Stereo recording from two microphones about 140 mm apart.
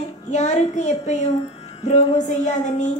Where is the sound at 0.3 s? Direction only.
55° left (ahead or behind).